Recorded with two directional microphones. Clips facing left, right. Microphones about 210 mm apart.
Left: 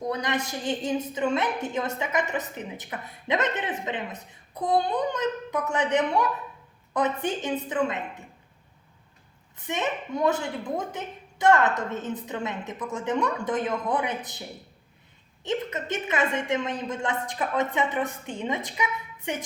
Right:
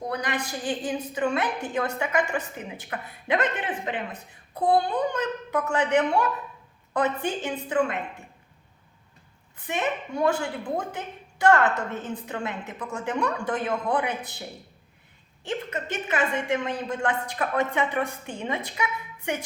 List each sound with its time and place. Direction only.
0.1 s a woman's voice: 25° left (ahead or behind)
9.6 s a woman's voice: 20° left (ahead or behind)
15.4 s a woman's voice: 20° left (ahead or behind)